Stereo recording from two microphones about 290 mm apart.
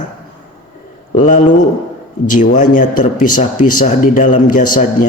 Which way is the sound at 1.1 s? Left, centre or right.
Left.